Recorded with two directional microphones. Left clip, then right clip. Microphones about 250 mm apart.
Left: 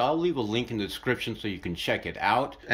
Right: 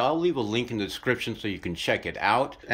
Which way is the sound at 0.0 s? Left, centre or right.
Centre.